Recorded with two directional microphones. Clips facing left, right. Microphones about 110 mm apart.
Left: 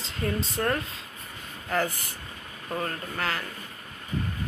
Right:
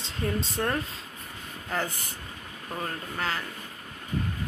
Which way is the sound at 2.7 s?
10° right (ahead or behind).